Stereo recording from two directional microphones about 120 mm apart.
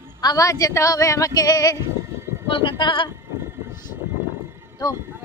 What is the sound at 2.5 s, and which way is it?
Speech, 45° left (ahead or behind).